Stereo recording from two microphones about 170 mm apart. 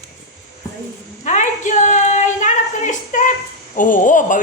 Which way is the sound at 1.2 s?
45° left (ahead or behind).